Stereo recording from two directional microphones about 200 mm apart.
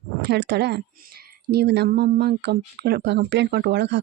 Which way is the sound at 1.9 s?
45° right (ahead or behind).